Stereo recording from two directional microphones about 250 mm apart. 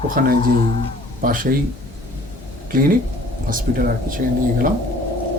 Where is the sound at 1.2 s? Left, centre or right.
Right.